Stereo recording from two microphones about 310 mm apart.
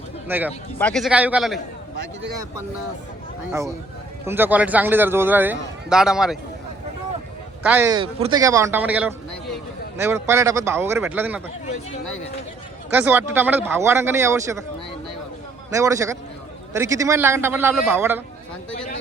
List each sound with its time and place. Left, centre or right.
0.3 s a man's voice: centre
4.3 s a man's voice: centre
7.6 s a man's voice: centre
12.9 s a man's voice: centre
15.7 s a man's voice: centre